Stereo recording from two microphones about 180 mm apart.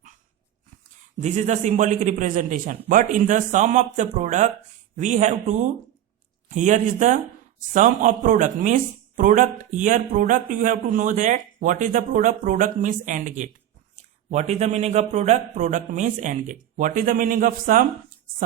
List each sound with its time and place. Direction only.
1.2 s a man's voice: 40° right (ahead or behind)